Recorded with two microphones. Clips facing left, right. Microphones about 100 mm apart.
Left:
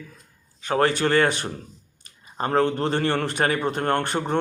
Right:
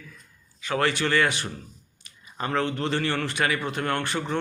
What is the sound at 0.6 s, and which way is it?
A man's voice, 45° left (ahead or behind).